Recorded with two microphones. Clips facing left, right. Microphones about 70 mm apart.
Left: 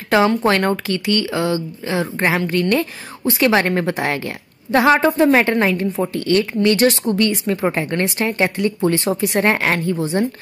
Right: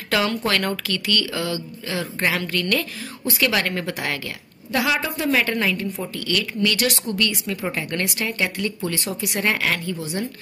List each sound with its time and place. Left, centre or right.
0.1 s speech: left